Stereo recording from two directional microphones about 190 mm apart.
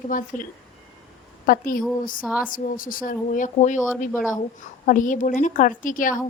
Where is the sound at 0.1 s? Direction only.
45° left (ahead or behind).